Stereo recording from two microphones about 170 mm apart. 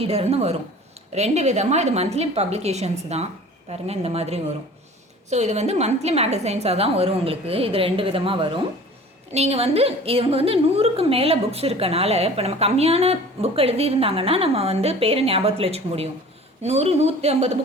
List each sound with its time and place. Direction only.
0.0 s a woman's voice: 35° right (ahead or behind)